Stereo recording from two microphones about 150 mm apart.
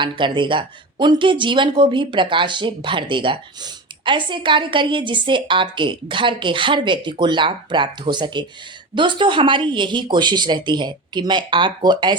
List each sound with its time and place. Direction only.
0.0 s speech: 30° right (ahead or behind)